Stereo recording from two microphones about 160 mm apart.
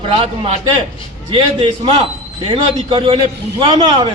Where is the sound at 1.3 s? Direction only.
35° right (ahead or behind).